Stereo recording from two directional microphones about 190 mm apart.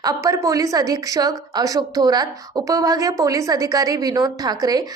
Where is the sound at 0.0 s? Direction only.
20° right (ahead or behind).